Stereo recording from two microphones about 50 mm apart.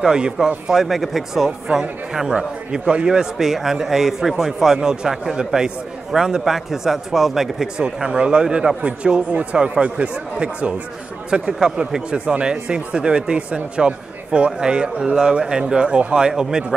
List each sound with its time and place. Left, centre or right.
0.0 s speech: centre